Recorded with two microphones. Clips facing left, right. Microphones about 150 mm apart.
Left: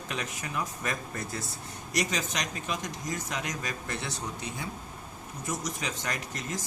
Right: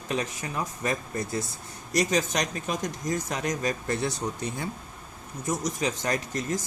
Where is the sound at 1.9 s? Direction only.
40° right (ahead or behind).